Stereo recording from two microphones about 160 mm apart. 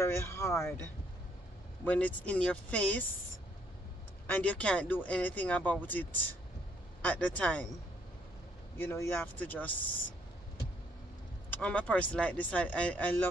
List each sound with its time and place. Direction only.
0.0 s speech: 15° left (ahead or behind)
4.3 s speech: 10° left (ahead or behind)
8.7 s speech: 15° left (ahead or behind)
11.5 s speech: 10° left (ahead or behind)